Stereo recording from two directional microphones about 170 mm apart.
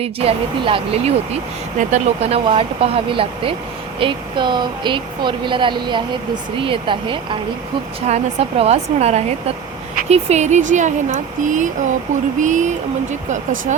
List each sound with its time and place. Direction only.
0.0 s speech: 35° right (ahead or behind)
8.0 s speech: 40° right (ahead or behind)